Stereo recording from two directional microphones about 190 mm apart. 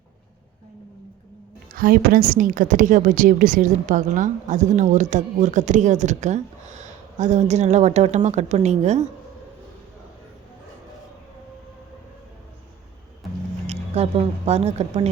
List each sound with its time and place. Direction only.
1.7 s a woman's voice: 50° right (ahead or behind)
13.7 s speech: 30° right (ahead or behind)